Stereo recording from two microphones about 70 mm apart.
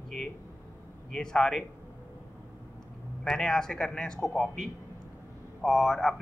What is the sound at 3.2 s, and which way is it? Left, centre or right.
A man's voice, centre.